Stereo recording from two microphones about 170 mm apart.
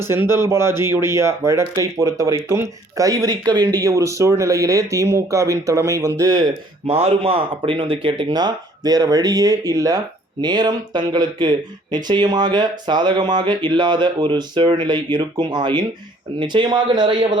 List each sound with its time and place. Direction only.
0.0 s speech: 15° right (ahead or behind)
6.9 s speech: 35° right (ahead or behind)